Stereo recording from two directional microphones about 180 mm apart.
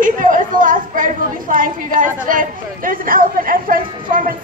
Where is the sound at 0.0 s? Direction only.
50° right (ahead or behind).